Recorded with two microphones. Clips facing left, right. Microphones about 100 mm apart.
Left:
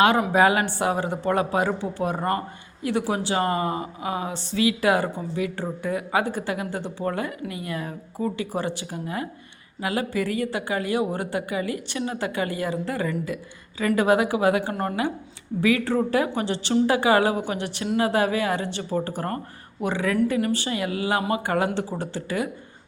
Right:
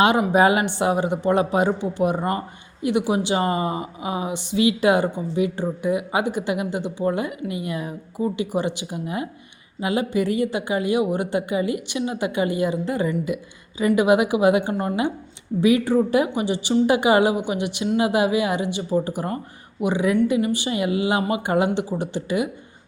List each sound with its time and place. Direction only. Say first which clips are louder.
0.3 s speech: right 2 dB; 20° right (ahead or behind)